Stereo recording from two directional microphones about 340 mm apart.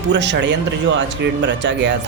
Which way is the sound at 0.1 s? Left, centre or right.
Right.